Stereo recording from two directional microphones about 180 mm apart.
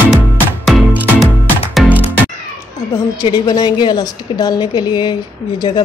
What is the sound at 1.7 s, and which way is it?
Music, 10° left (ahead or behind).